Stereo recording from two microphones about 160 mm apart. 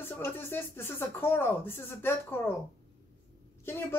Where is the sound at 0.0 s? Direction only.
15° left (ahead or behind).